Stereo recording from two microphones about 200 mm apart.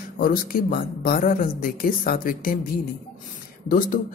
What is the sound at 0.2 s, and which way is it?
Speech, 45° left (ahead or behind).